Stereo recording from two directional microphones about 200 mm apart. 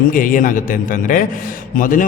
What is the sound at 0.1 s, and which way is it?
A man's voice, 40° left (ahead or behind).